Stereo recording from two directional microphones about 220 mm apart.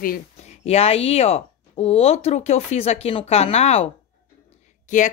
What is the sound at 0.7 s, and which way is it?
A woman's voice, 25° left (ahead or behind).